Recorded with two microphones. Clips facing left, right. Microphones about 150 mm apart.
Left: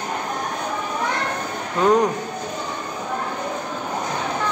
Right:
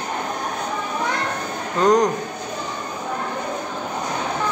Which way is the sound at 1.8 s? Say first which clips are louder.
Right 1 dB; 5° left (ahead or behind).